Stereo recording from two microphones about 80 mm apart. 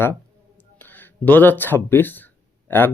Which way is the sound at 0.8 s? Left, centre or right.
Left.